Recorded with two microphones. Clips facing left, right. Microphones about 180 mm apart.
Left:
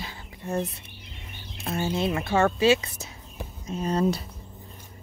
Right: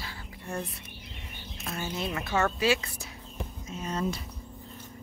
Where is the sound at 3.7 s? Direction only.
35° left (ahead or behind).